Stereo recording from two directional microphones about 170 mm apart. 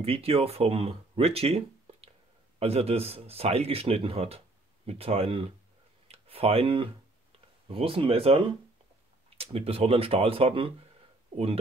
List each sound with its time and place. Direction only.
0.0 s a man's voice: 35° right (ahead or behind)
6.0 s a sound: 35° right (ahead or behind)
7.3 s a man's voice: 35° right (ahead or behind)